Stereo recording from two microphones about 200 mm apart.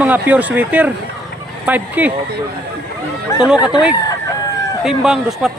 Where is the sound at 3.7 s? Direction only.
5° right (ahead or behind).